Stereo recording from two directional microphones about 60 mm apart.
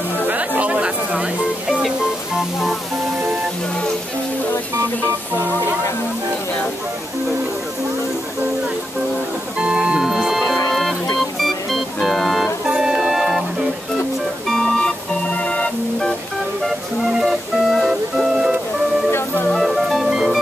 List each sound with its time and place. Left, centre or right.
0.6 s chatter: right
9.6 s organ: centre
10.7 s music: centre
12.6 s music: centre
14.5 s organ: centre
17.1 s music: centre